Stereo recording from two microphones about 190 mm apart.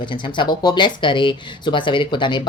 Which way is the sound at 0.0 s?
25° left (ahead or behind).